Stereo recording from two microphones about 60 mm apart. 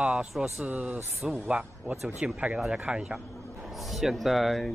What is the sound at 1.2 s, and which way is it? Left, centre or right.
Speech, centre.